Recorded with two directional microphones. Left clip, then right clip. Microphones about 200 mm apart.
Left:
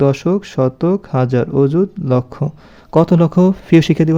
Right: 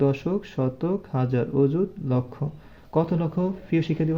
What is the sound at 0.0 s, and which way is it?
A man's voice, 45° left (ahead or behind).